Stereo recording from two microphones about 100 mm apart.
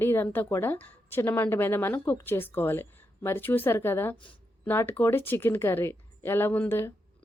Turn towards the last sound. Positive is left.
turn(degrees=20)  # may be behind; listen again after turning